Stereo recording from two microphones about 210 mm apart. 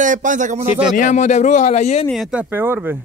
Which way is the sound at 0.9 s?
35° left (ahead or behind).